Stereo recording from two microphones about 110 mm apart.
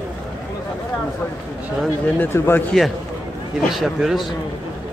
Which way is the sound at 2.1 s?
20° left (ahead or behind).